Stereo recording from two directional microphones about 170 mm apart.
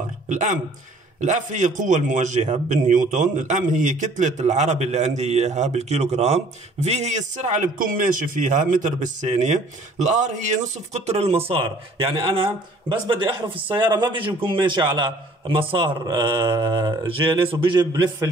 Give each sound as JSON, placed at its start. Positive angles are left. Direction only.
{"t": 0.3, "sound": "a man's voice", "side_deg": -45}